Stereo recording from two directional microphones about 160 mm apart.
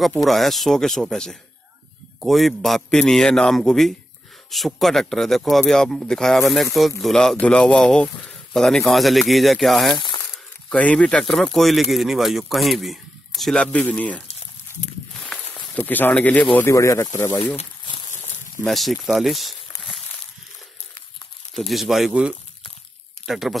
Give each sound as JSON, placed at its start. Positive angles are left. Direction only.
{"t": 0.2, "sound": "speech", "side_deg": 0}
{"t": 9.9, "sound": "crumpling", "side_deg": 30}
{"t": 10.3, "sound": "speech", "side_deg": 10}
{"t": 15.7, "sound": "speech", "side_deg": 10}
{"t": 18.7, "sound": "speech", "side_deg": 0}
{"t": 21.5, "sound": "speech", "side_deg": 0}